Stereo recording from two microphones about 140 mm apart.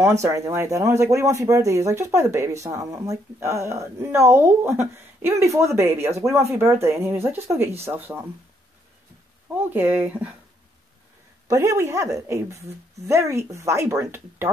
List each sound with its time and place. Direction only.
0.2 s speech: 20° right (ahead or behind)
9.5 s speech: 15° right (ahead or behind)
11.4 s speech: 25° right (ahead or behind)